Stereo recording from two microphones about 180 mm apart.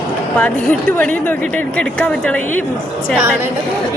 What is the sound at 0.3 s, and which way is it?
A woman's voice, 10° left (ahead or behind).